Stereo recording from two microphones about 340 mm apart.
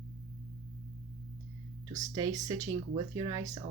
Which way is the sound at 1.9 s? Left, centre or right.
Centre.